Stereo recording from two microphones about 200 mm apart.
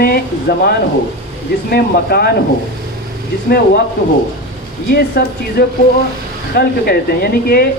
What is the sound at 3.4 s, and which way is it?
Speech, 50° left (ahead or behind).